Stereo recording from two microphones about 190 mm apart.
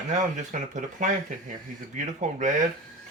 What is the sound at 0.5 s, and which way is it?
Speech, 40° right (ahead or behind).